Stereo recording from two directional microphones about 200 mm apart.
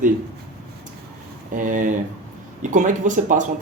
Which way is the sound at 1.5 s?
40° right (ahead or behind).